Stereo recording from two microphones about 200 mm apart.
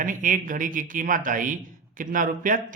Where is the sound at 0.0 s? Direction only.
40° right (ahead or behind).